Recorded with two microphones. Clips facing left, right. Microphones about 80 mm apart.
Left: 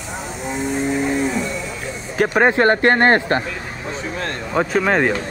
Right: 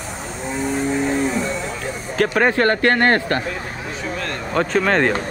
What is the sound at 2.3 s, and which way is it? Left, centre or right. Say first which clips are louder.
Speech: left 3 dB; left.